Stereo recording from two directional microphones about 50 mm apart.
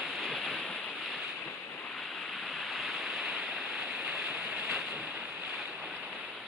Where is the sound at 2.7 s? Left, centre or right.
Centre.